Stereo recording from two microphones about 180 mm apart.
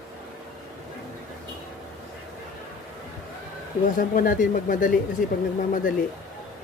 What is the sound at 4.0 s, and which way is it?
Speech, 50° left (ahead or behind).